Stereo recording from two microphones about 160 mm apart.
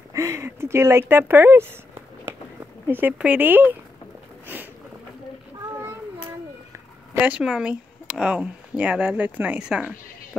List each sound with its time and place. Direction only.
0.1 s a sound: 15° right (ahead or behind)
2.9 s speech: 10° right (ahead or behind)
7.2 s speech: 10° right (ahead or behind)